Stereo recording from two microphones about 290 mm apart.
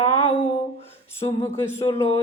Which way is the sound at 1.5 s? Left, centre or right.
Centre.